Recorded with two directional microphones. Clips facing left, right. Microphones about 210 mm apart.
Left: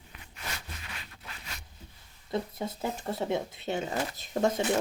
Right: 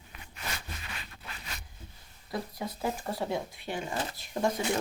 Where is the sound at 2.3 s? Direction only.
25° left (ahead or behind).